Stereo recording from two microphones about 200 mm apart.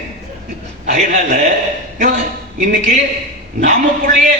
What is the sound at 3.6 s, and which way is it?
Speech, 40° right (ahead or behind).